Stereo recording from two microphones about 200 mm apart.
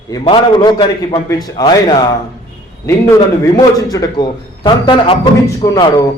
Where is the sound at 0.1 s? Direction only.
20° left (ahead or behind).